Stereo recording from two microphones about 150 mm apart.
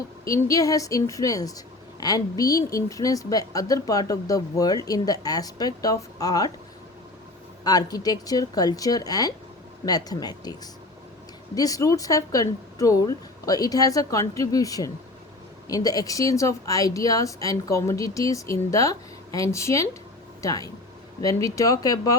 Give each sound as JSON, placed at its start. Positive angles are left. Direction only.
{"t": 0.3, "sound": "a woman's voice", "side_deg": 20}
{"t": 7.6, "sound": "a woman's voice", "side_deg": 25}